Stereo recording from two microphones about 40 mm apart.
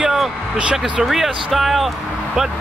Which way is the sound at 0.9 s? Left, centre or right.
Centre.